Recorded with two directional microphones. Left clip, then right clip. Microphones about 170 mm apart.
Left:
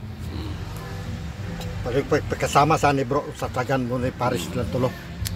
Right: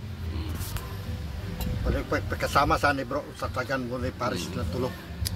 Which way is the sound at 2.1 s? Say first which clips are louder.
Left 6 dB; 65° left (ahead or behind).